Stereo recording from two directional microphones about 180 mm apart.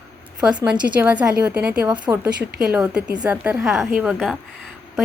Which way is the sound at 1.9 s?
25° right (ahead or behind).